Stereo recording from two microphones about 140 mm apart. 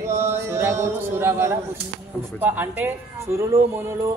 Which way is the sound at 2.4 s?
10° right (ahead or behind).